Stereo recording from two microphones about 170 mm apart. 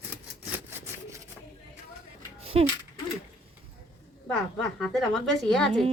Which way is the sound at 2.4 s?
35° right (ahead or behind).